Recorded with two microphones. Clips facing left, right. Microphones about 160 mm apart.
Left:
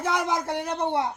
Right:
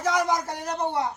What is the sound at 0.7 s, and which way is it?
Speech, 25° left (ahead or behind).